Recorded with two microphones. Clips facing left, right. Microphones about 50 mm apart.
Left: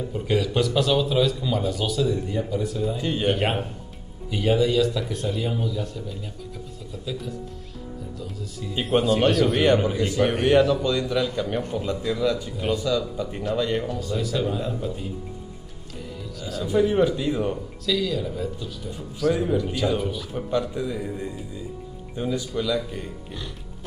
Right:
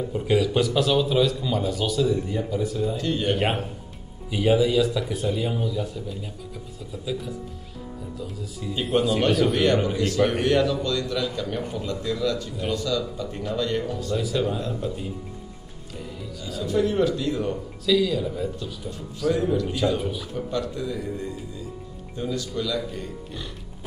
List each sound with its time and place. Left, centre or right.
0.0 s speech: centre
3.0 s a man's voice: centre
4.3 s speech: centre
9.5 s a man's voice: centre
10.0 s a man's voice: centre
14.1 s speech: centre
16.3 s speech: centre
16.6 s a man's voice: centre
17.8 s speech: centre
19.3 s a man's voice: centre
20.0 s speech: centre
20.3 s a man's voice: centre